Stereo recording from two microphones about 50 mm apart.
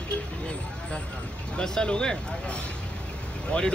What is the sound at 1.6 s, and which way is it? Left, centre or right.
Speech, centre.